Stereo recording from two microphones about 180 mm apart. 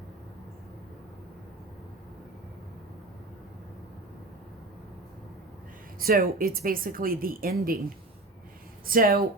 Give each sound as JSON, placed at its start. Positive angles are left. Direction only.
{"t": 6.0, "sound": "speech", "side_deg": -55}
{"t": 8.9, "sound": "speech", "side_deg": -55}